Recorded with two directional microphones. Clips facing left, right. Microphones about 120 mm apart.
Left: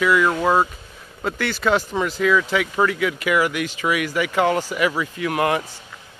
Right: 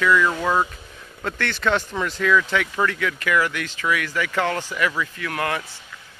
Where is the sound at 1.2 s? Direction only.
5° left (ahead or behind).